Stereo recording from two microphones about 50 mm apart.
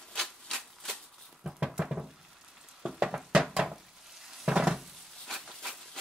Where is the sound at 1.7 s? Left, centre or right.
Centre.